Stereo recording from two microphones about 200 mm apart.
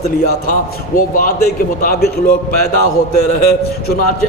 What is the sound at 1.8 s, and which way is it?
A man's voice, 50° left (ahead or behind).